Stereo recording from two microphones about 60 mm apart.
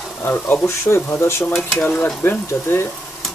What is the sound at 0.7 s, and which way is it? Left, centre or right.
Speech, left.